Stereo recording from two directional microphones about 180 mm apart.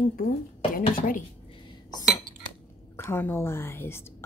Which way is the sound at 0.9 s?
50° left (ahead or behind).